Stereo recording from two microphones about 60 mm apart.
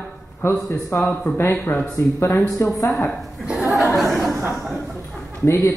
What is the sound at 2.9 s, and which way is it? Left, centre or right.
Speech, centre.